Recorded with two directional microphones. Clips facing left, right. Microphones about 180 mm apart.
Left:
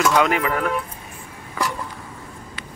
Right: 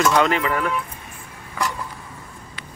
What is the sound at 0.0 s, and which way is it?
Speech, 5° left (ahead or behind).